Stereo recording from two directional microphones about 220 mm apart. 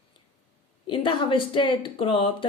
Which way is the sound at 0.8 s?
20° left (ahead or behind).